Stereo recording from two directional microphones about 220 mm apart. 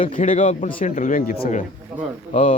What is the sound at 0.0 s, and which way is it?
A man's voice, 35° left (ahead or behind).